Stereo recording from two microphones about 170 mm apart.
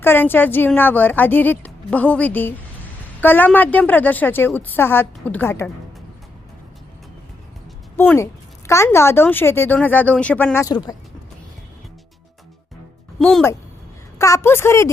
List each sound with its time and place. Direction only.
0.0 s a woman's voice: 10° left (ahead or behind)
7.9 s a woman's voice: 15° left (ahead or behind)
13.1 s speech: centre (ahead or behind)
14.2 s a woman's voice: 20° left (ahead or behind)